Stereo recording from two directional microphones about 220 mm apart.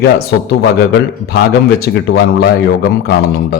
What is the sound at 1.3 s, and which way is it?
A man's voice, 45° left (ahead or behind).